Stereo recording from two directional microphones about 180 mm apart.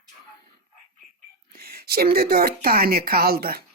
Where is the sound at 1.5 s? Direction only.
60° right (ahead or behind).